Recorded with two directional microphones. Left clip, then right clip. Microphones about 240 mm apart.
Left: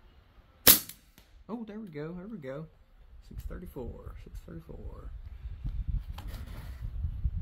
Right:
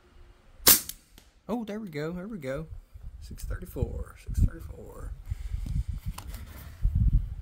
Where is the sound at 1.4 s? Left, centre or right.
Right.